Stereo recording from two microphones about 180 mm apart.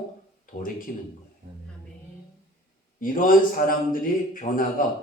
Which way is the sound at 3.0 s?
50° left (ahead or behind).